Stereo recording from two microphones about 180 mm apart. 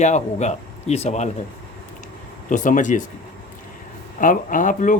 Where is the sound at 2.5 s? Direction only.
45° left (ahead or behind).